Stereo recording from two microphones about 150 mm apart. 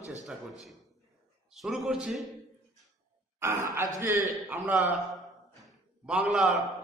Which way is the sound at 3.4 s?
15° right (ahead or behind).